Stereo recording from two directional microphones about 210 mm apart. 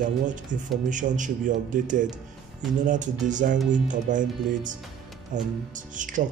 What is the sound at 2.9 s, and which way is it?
Speech, 35° right (ahead or behind).